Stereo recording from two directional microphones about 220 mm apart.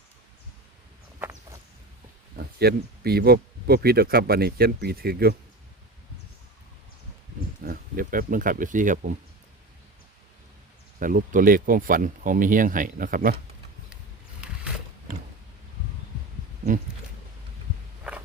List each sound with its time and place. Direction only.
2.4 s speech: 45° right (ahead or behind)
7.6 s speech: 40° right (ahead or behind)
11.0 s speech: 40° right (ahead or behind)
14.4 s boat: 5° right (ahead or behind)